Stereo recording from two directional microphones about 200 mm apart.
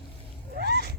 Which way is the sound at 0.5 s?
55° right (ahead or behind).